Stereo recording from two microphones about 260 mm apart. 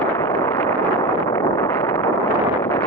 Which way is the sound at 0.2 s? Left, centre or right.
Centre.